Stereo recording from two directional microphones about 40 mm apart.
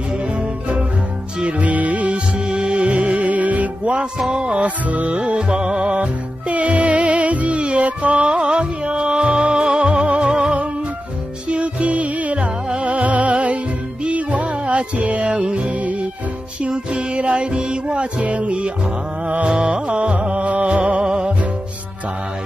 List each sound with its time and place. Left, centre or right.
1.4 s music: right
2.3 s music: right
4.6 s music: right
5.2 s music: right
19.5 s music: right
21.0 s music: centre